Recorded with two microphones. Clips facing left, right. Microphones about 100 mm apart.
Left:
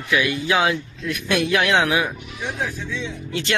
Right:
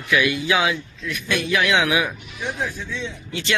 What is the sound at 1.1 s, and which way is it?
Speech, 60° left (ahead or behind).